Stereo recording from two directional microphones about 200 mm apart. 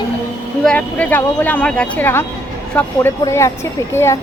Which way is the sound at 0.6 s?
5° left (ahead or behind).